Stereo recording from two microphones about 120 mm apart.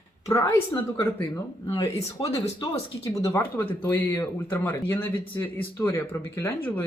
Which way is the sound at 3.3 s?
20° left (ahead or behind).